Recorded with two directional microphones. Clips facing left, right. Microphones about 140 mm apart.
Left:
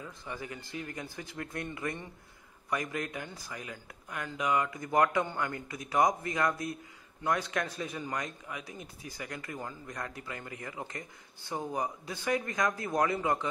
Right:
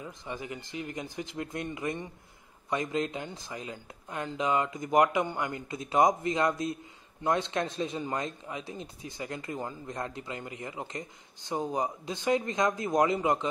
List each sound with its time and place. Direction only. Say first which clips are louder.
0.0 s speech: right 2 dB; 20° right (ahead or behind)